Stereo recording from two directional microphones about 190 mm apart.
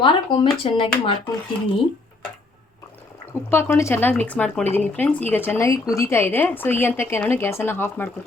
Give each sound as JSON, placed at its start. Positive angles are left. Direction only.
{"t": 0.0, "sound": "speech", "side_deg": 25}
{"t": 3.5, "sound": "speech", "side_deg": 10}